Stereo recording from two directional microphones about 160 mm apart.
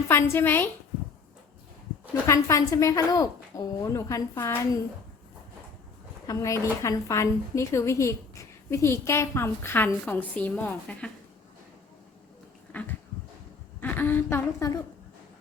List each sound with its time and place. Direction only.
0.1 s a woman's voice: 15° left (ahead or behind)
2.2 s a woman's voice: 20° left (ahead or behind)
6.2 s a woman's voice: 20° left (ahead or behind)
12.7 s a woman's voice: 10° left (ahead or behind)